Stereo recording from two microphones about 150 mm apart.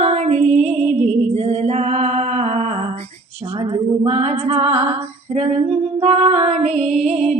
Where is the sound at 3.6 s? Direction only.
35° right (ahead or behind).